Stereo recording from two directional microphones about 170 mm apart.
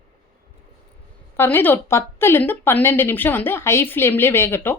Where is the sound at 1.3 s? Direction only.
15° left (ahead or behind).